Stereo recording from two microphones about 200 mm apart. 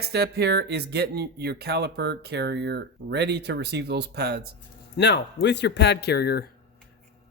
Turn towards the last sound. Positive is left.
turn(degrees=55)  # may be behind; listen again after turning